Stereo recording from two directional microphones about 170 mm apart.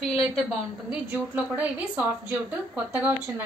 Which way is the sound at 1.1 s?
10° right (ahead or behind).